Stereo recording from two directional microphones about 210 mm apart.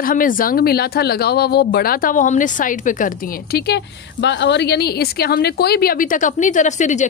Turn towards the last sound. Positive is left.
turn(degrees=35)  # may be behind; listen again after turning